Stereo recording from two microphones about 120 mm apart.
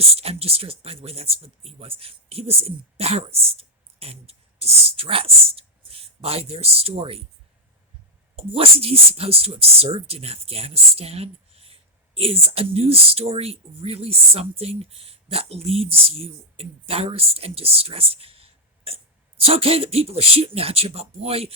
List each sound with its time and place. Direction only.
0.0 s speech: 55° right (ahead or behind)
8.4 s speech: 55° right (ahead or behind)